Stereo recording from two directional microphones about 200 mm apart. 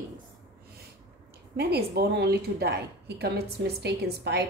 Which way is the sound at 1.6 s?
55° right (ahead or behind).